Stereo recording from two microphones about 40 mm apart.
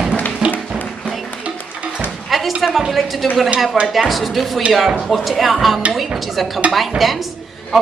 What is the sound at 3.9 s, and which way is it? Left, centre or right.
A woman's voice, centre.